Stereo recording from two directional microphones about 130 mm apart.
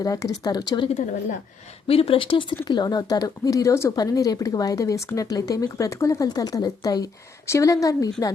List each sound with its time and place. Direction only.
0.0 s speech: 25° left (ahead or behind)
1.9 s speech: 45° left (ahead or behind); by 8.1 s 25° left (ahead or behind)